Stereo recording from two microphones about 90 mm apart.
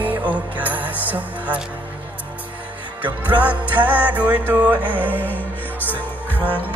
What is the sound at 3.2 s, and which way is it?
Music, 15° right (ahead or behind).